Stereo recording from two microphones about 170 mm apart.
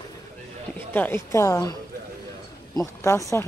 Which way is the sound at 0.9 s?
10° left (ahead or behind).